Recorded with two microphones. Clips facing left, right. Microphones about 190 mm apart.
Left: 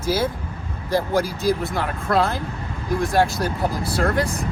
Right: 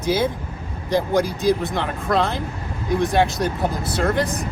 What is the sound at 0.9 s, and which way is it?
Speech, 15° right (ahead or behind).